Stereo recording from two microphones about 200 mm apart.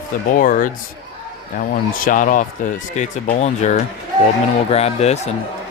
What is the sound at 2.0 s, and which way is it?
Speech, 40° left (ahead or behind).